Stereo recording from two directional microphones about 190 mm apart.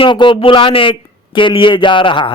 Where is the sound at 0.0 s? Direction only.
25° left (ahead or behind).